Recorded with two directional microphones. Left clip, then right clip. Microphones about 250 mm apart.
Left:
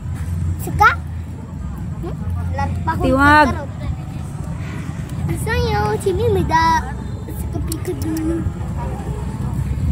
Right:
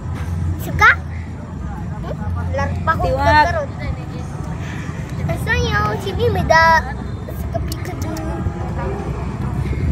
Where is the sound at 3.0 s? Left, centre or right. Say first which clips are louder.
Left 3 dB; centre.